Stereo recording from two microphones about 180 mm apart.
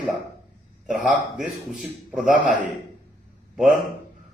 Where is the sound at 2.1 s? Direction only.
5° right (ahead or behind).